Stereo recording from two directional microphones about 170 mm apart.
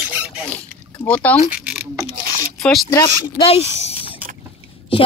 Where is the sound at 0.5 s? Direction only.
10° left (ahead or behind).